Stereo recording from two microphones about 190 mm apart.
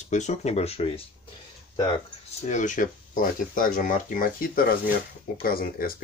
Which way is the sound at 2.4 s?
40° left (ahead or behind).